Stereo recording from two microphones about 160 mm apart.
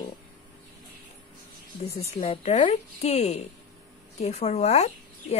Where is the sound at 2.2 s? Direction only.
40° left (ahead or behind).